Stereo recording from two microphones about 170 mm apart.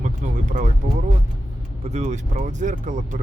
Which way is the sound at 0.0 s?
50° right (ahead or behind).